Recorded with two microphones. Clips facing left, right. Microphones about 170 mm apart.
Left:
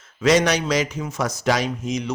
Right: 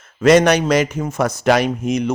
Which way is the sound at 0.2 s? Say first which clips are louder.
Right 6 dB; 55° right (ahead or behind).